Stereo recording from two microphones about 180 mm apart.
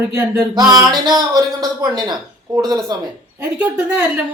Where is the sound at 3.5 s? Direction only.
5° right (ahead or behind).